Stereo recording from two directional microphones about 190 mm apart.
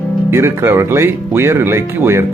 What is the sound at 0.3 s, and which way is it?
Speech, 15° right (ahead or behind).